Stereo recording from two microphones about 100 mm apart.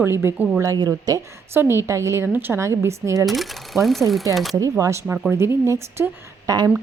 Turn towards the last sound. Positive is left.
turn(degrees=-25)  # may be behind; listen again after turning